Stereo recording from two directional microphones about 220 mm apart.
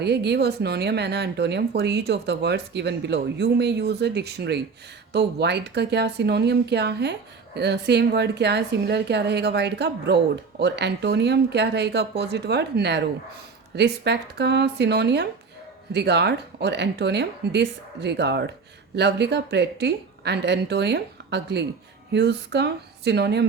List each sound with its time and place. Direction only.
0.0 s speech: 50° right (ahead or behind)